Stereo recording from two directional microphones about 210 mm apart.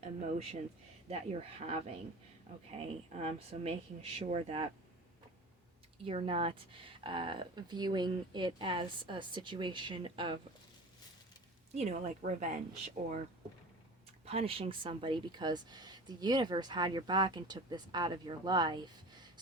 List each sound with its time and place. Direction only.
0.0 s speech: 30° right (ahead or behind)
6.1 s speech: 25° right (ahead or behind)
11.7 s speech: 30° right (ahead or behind)
14.3 s speech: 30° right (ahead or behind)